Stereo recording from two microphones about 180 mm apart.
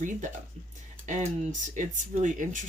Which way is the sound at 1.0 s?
45° right (ahead or behind).